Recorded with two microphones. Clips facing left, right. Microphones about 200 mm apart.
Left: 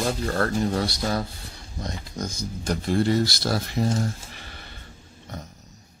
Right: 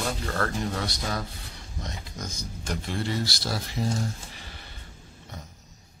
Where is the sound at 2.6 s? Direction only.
40° left (ahead or behind).